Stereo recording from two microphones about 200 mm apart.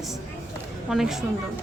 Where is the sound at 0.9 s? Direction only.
Centre (ahead or behind).